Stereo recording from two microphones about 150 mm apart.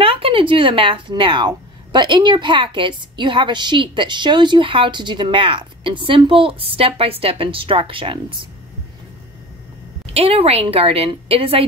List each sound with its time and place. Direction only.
0.0 s a woman's voice: 35° right (ahead or behind)
10.0 s a woman's voice: 40° right (ahead or behind)